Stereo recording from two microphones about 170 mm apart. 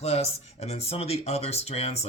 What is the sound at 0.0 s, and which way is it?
Speech, 40° left (ahead or behind).